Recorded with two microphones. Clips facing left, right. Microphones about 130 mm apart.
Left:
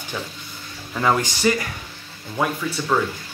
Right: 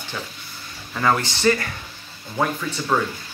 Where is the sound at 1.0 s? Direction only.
10° left (ahead or behind).